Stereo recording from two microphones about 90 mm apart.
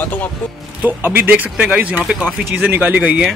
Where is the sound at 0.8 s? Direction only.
20° right (ahead or behind).